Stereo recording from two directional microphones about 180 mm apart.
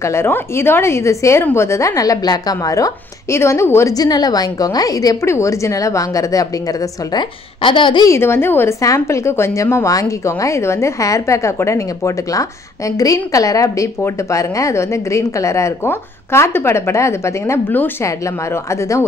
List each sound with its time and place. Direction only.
0.0 s a woman's voice: 15° left (ahead or behind)